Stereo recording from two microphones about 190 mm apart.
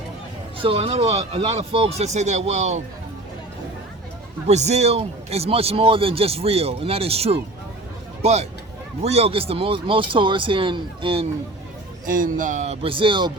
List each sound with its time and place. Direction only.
0.6 s a man's voice: 30° right (ahead or behind)
4.4 s a man's voice: 35° right (ahead or behind)
12.0 s a man's voice: 45° right (ahead or behind); by 13.3 s 25° right (ahead or behind)